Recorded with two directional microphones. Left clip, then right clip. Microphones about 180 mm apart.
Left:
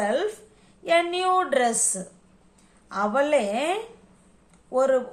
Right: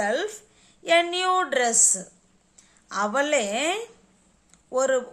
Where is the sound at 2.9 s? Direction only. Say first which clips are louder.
Left 1 dB; 35° right (ahead or behind).